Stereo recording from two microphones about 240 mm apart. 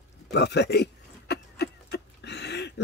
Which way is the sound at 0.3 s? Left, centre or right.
Left.